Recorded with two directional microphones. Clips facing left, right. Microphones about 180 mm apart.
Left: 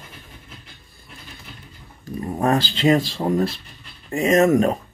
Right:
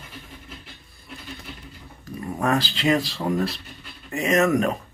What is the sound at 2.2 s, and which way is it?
Speech, 25° left (ahead or behind).